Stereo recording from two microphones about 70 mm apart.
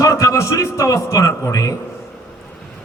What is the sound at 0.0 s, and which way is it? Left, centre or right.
A man's voice, left.